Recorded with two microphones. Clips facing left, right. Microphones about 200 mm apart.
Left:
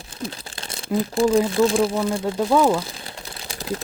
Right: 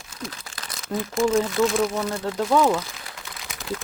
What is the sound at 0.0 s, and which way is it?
Crumpling, 30° left (ahead or behind).